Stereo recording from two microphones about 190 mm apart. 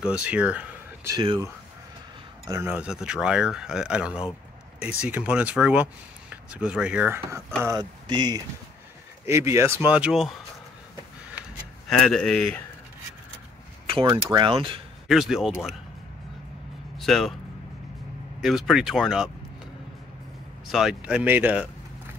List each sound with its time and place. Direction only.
0.0 s speech: 5° right (ahead or behind)
1.1 s speech: 25° right (ahead or behind)
2.4 s speech: 15° right (ahead or behind)
11.9 s speech: 5° left (ahead or behind)
13.8 s speech: 25° right (ahead or behind)
15.0 s speech: centre (ahead or behind)
17.0 s speech: centre (ahead or behind)
18.4 s speech: centre (ahead or behind)
20.6 s speech: centre (ahead or behind)